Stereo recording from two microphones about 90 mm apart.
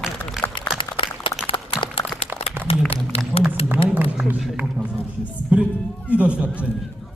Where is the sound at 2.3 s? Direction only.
20° right (ahead or behind).